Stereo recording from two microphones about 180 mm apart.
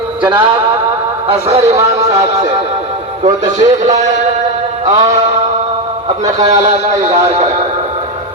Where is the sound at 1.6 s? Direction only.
15° right (ahead or behind).